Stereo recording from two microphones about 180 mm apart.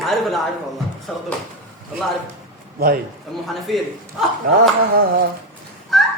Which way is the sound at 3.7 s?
Centre (ahead or behind).